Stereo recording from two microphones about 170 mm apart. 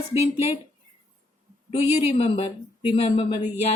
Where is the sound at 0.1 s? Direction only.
35° left (ahead or behind).